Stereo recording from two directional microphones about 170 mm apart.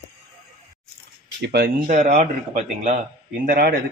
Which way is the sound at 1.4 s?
70° right (ahead or behind).